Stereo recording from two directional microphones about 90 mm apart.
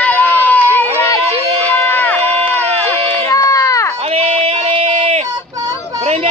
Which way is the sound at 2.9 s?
30° left (ahead or behind).